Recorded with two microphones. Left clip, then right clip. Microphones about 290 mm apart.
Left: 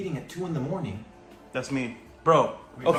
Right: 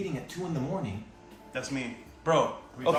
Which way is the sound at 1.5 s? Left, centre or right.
Left.